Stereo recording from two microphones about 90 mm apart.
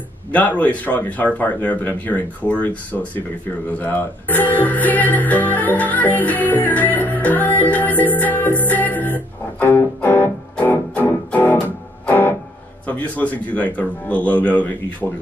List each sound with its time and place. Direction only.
0.3 s speech: 15° left (ahead or behind)